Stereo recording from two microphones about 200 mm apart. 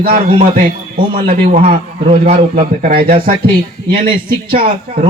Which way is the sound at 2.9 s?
45° right (ahead or behind).